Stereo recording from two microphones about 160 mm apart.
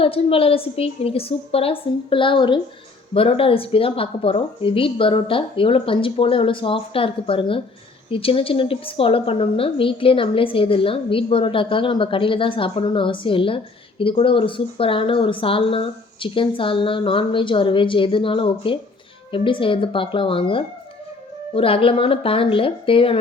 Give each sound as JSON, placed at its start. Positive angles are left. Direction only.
{"t": 0.0, "sound": "speech", "side_deg": 35}